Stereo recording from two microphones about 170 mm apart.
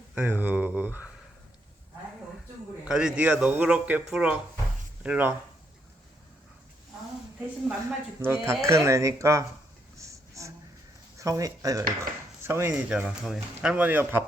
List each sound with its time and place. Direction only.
0.1 s speech: 10° right (ahead or behind)
2.8 s speech: 5° right (ahead or behind)
8.2 s speech: 15° right (ahead or behind)
10.0 s a sound: 20° right (ahead or behind)
11.2 s speech: 20° right (ahead or behind)